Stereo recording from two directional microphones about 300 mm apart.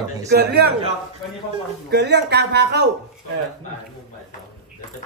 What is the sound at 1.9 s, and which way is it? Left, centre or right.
Speech, right.